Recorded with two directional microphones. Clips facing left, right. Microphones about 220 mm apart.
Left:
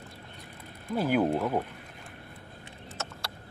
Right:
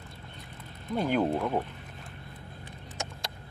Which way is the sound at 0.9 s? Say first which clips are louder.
Left 1 dB; 5° left (ahead or behind).